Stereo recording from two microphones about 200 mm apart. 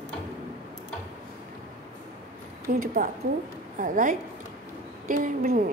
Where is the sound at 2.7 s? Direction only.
45° right (ahead or behind).